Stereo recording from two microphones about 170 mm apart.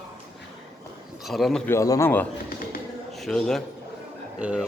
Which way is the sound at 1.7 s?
20° left (ahead or behind).